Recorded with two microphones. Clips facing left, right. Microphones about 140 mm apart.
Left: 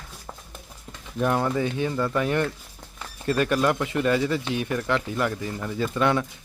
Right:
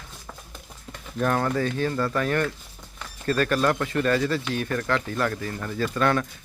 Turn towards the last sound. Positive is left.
turn(degrees=15)  # may be behind; listen again after turning